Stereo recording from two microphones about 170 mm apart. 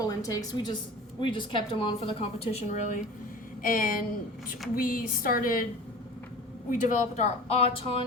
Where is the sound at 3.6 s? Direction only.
55° left (ahead or behind).